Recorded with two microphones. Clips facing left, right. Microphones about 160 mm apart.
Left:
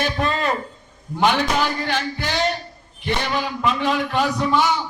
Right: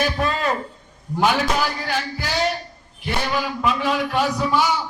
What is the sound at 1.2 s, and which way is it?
A man's voice, 5° right (ahead or behind).